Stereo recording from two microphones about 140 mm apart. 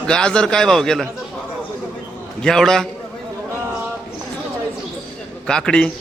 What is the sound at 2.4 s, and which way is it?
Speech, 5° left (ahead or behind).